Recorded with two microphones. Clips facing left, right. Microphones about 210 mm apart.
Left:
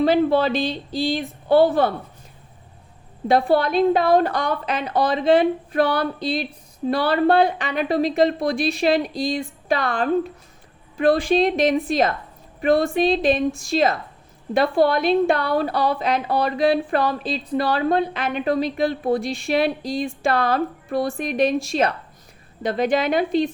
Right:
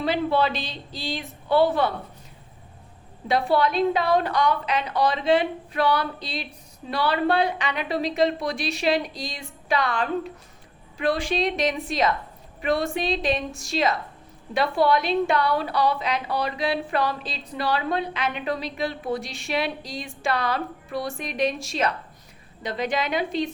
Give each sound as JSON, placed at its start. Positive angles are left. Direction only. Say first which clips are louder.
{"t": 0.0, "sound": "a woman's voice", "louder": "left 6 dB", "side_deg": 45}
{"t": 3.2, "sound": "a woman's voice", "louder": "left 4 dB", "side_deg": 50}